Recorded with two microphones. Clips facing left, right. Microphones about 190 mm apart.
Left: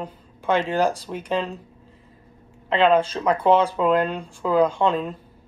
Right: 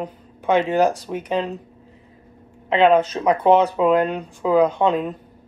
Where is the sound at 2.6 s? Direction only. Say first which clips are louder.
Right 3 dB; 10° right (ahead or behind).